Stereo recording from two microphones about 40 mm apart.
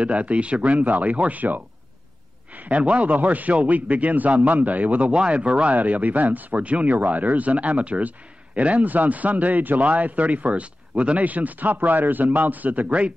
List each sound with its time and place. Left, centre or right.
0.0 s a man's voice: right
2.8 s a man's voice: right
5.8 s speech: right